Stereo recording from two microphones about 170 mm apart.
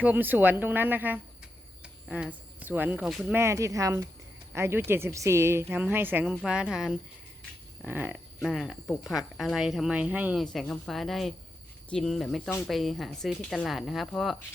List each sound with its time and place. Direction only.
0.0 s speech: 10° right (ahead or behind)
3.3 s speech: 15° right (ahead or behind)
8.4 s speech: centre (ahead or behind)
10.4 s speech: centre (ahead or behind)